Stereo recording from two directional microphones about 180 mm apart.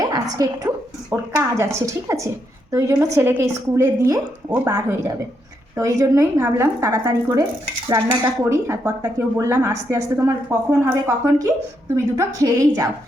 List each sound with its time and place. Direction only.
0.0 s a woman's voice: 20° right (ahead or behind)